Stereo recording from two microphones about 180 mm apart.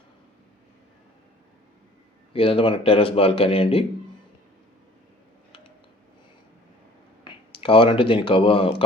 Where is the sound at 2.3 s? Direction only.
30° left (ahead or behind).